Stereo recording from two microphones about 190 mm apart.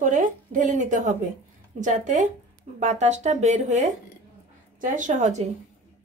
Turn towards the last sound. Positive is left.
turn(degrees=-40)  # may be behind; listen again after turning